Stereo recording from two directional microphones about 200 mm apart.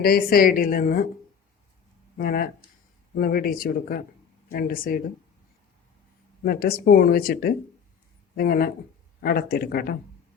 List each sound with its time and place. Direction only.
0.0 s speech: 50° left (ahead or behind)
2.1 s speech: 45° left (ahead or behind)
6.4 s speech: 50° left (ahead or behind)